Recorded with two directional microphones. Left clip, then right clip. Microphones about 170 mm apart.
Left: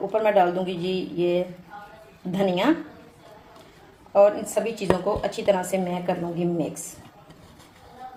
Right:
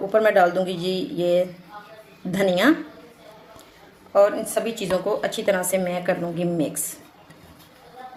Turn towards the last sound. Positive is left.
turn(degrees=-30)  # may be behind; listen again after turning